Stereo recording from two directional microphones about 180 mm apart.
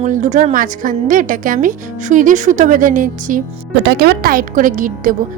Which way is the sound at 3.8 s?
65° right (ahead or behind).